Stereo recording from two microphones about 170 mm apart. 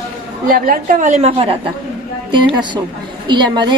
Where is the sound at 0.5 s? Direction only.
55° right (ahead or behind).